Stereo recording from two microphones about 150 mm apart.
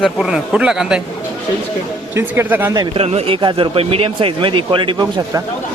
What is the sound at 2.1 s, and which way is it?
Speech, 15° right (ahead or behind).